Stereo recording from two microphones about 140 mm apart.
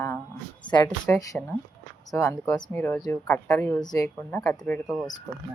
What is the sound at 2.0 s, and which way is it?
Speech, 20° left (ahead or behind).